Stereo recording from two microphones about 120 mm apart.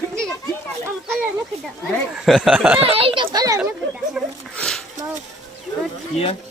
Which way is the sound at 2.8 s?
55° right (ahead or behind).